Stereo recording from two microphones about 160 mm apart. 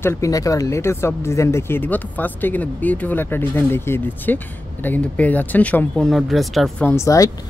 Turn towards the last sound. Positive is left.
turn(degrees=20)  # may be behind; listen again after turning